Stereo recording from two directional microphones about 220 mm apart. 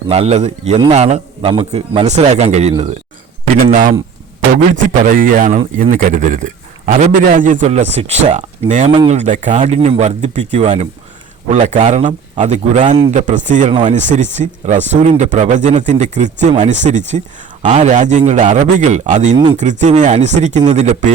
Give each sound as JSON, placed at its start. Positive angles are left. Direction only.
{"t": 0.1, "sound": "a man's voice", "side_deg": -30}